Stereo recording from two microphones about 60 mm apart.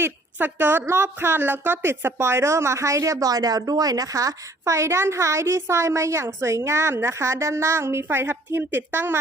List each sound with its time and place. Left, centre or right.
0.3 s a woman's voice: right